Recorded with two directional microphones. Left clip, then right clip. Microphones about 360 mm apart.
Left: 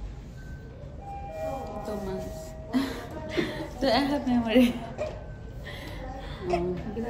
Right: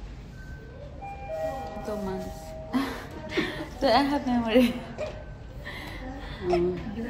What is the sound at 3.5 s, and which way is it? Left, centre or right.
A woman's voice, centre.